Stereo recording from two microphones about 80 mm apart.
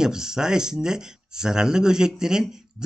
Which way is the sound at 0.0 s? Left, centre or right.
Centre.